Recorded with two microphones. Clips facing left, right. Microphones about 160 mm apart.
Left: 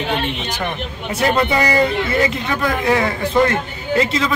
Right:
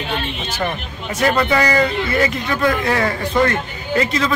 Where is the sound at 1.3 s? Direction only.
20° left (ahead or behind).